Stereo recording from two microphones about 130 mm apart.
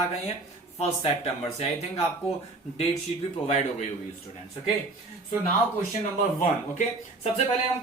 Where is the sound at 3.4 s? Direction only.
60° left (ahead or behind).